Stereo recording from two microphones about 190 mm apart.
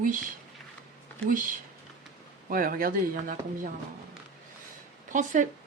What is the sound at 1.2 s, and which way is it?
Speech, 45° right (ahead or behind).